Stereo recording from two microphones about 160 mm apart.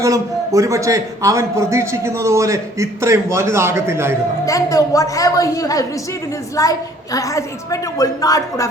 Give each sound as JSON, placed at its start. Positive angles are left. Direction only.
{"t": 0.0, "sound": "a man's voice", "side_deg": -20}
{"t": 4.4, "sound": "a woman's voice", "side_deg": 20}